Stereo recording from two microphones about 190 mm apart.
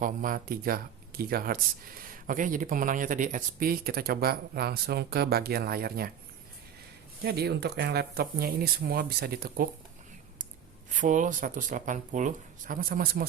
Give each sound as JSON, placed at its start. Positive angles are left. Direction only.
{"t": 0.0, "sound": "speech", "side_deg": -45}
{"t": 7.3, "sound": "speech", "side_deg": -60}
{"t": 10.9, "sound": "speech", "side_deg": -40}